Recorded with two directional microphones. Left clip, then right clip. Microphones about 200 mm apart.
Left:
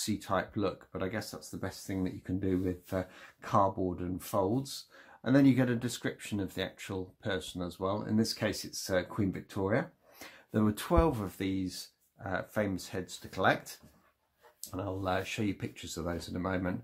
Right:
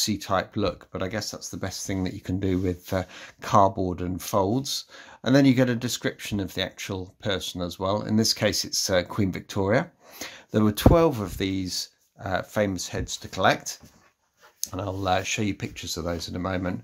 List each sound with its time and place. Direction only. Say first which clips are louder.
0.0 s speech: right 8 dB; 35° right (ahead or behind)
14.7 s speech: right 8 dB; 40° right (ahead or behind)